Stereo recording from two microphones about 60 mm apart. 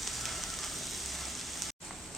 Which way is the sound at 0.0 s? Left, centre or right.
Centre.